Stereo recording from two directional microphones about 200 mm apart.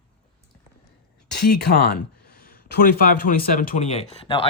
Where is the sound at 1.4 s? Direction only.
55° left (ahead or behind); by 4.4 s 30° left (ahead or behind).